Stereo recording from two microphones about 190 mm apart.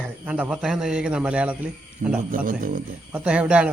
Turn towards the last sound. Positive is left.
turn(degrees=-5)  # may be behind; listen again after turning